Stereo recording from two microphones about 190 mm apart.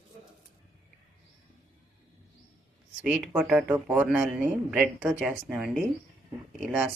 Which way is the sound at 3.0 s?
Centre (ahead or behind).